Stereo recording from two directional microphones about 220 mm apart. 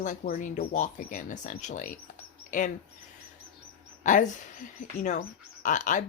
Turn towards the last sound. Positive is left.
turn(degrees=35)  # may be behind; listen again after turning